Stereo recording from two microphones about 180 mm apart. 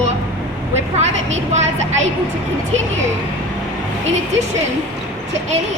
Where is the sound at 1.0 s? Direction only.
40° right (ahead or behind).